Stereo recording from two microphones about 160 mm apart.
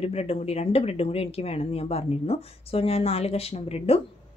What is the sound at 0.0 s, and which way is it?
Speech, 40° left (ahead or behind).